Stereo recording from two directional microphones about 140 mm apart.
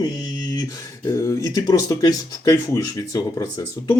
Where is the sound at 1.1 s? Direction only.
20° left (ahead or behind).